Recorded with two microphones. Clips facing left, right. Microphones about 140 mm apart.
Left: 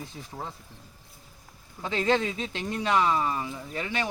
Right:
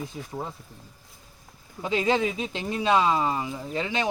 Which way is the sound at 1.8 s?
15° right (ahead or behind).